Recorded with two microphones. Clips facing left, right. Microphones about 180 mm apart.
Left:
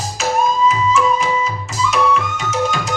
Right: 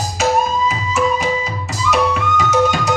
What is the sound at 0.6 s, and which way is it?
Music, 65° right (ahead or behind).